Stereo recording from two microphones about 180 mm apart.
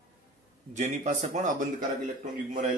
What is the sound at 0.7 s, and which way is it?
Speech, 40° right (ahead or behind).